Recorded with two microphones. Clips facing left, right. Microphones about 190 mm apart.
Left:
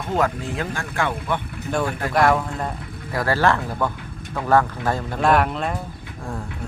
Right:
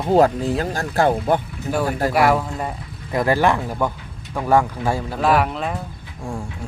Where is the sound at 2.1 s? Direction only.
10° right (ahead or behind).